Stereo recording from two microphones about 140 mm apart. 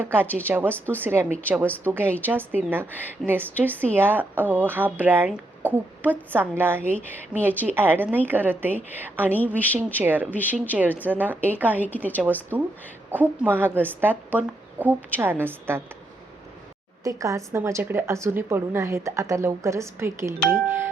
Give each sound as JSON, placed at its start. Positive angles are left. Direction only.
{"t": 0.0, "sound": "speech", "side_deg": -15}
{"t": 10.8, "sound": "speech", "side_deg": 10}
{"t": 11.1, "sound": "speech", "side_deg": -15}
{"t": 11.8, "sound": "speech", "side_deg": 10}
{"t": 13.1, "sound": "speech", "side_deg": -15}
{"t": 17.0, "sound": "a woman's voice", "side_deg": -25}